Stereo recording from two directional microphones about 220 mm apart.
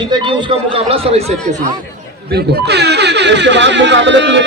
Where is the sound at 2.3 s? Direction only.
45° right (ahead or behind).